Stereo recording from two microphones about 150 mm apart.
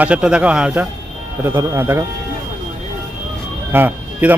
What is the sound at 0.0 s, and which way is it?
Speech, 5° right (ahead or behind).